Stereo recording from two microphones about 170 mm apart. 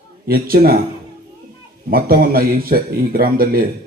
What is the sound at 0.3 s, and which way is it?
Speech, 60° right (ahead or behind).